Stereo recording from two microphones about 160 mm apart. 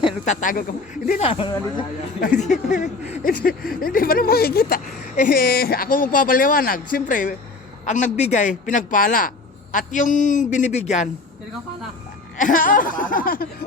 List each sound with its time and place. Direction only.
0.3 s a man's voice: 55° left (ahead or behind)
1.2 s speech: 35° left (ahead or behind)
2.4 s a man's voice: 50° left (ahead or behind)
12.4 s speech: 55° left (ahead or behind)